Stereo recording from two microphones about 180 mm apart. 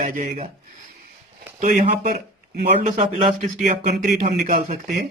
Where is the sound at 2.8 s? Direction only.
35° right (ahead or behind).